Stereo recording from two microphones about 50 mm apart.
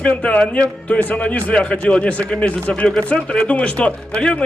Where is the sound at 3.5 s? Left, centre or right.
Left.